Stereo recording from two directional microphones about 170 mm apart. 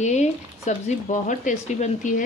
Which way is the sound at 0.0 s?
45° left (ahead or behind).